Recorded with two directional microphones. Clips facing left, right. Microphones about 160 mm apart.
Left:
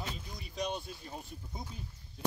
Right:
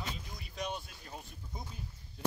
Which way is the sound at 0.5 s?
5° right (ahead or behind).